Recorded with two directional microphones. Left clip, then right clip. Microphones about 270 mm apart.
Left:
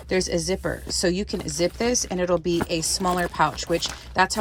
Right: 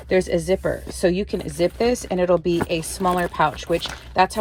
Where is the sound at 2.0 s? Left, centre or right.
Left.